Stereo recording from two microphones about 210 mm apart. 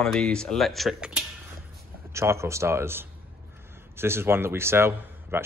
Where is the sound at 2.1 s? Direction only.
15° right (ahead or behind).